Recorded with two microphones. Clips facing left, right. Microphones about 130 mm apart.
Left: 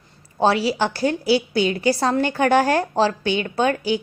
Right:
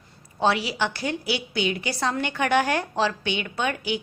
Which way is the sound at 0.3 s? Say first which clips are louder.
Left 5 dB; 35° left (ahead or behind).